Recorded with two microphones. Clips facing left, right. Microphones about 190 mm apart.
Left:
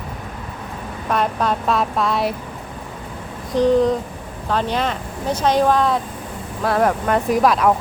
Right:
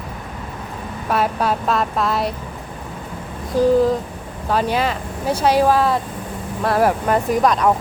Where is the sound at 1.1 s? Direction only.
5° right (ahead or behind).